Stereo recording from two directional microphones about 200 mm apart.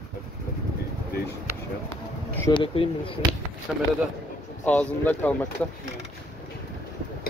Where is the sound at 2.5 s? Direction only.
25° left (ahead or behind).